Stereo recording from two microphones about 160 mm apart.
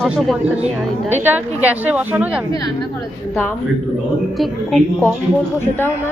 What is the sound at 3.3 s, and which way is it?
Speech, 15° left (ahead or behind).